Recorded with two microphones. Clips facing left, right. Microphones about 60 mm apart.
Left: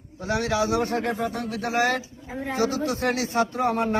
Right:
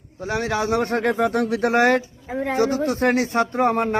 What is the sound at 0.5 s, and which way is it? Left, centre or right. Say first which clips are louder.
Speech: right 3 dB; right.